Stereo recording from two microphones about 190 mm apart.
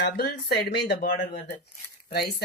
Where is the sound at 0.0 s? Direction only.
60° left (ahead or behind).